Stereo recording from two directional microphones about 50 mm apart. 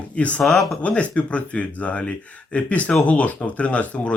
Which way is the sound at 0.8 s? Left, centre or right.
Left.